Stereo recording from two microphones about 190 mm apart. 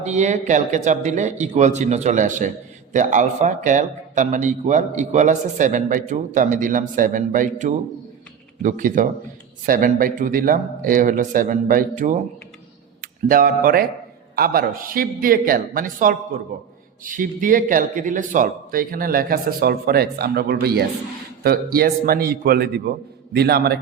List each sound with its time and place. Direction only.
0.0 s a man's voice: 40° right (ahead or behind); by 23.8 s 55° right (ahead or behind)